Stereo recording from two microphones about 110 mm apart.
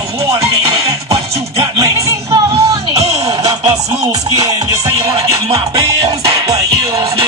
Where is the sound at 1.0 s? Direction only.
60° right (ahead or behind).